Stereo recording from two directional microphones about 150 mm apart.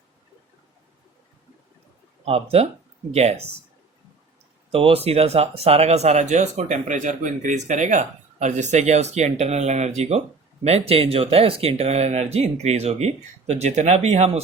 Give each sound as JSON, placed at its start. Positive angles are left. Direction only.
{"t": 2.2, "sound": "speech", "side_deg": -40}
{"t": 4.7, "sound": "speech", "side_deg": -40}